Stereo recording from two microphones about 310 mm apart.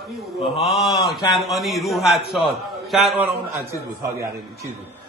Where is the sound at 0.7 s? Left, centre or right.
Centre.